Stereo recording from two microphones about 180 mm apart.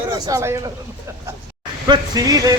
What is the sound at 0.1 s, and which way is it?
Speech, 15° right (ahead or behind).